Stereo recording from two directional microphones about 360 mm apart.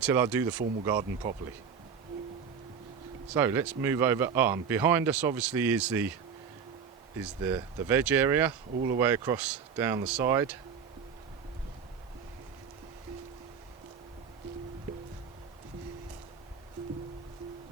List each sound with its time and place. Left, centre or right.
0.0 s speech: centre
3.3 s speech: centre
7.2 s speech: centre